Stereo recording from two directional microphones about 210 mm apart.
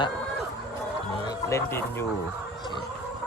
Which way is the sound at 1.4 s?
10° left (ahead or behind).